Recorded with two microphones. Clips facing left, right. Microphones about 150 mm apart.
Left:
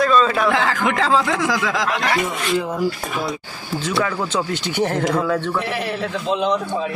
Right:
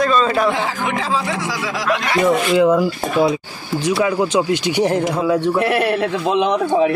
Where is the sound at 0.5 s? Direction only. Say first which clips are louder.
Left 1 dB; 90° left.